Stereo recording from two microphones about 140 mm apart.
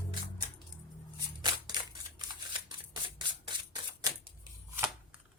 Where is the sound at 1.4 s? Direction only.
30° right (ahead or behind).